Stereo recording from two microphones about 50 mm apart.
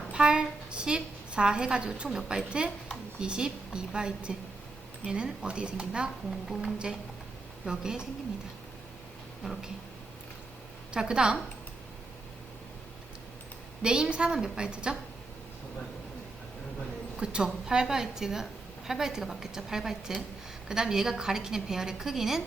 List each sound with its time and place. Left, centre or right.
0.1 s a woman's voice: centre
7.6 s a woman's voice: centre
9.4 s speech: centre
10.9 s a woman's voice: centre
13.8 s a woman's voice: centre
17.2 s a woman's voice: centre